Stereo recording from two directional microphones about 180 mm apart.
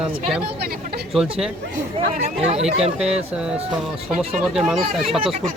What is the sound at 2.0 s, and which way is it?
Speech, 30° right (ahead or behind).